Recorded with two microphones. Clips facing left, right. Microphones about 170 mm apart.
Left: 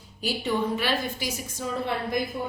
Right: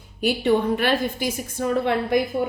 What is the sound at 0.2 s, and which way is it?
A woman's voice, 60° right (ahead or behind).